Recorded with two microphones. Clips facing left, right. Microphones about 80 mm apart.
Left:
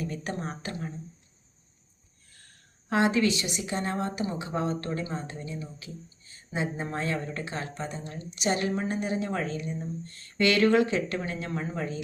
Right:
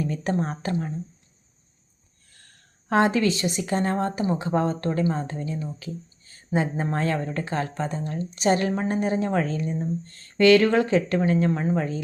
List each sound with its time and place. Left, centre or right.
0.0 s speech: right
2.9 s speech: right